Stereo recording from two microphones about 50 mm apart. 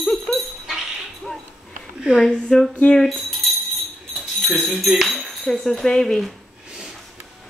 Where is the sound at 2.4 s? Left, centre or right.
Centre.